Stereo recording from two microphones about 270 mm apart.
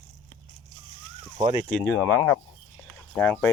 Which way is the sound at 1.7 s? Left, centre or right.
Centre.